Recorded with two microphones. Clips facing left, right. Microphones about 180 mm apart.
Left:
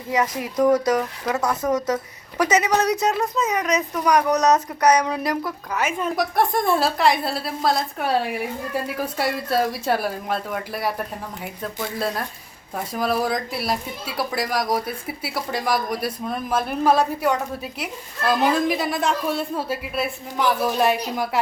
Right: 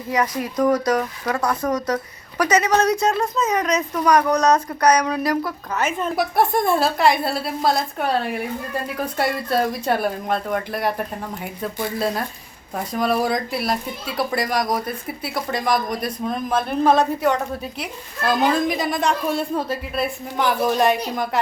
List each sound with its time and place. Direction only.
0.1 s speech: 20° left (ahead or behind)
1.2 s a woman's voice: 5° left (ahead or behind)
2.4 s speech: 20° left (ahead or behind)
5.5 s a woman's voice: 10° left (ahead or behind)
6.1 s a woman's voice: 5° right (ahead or behind)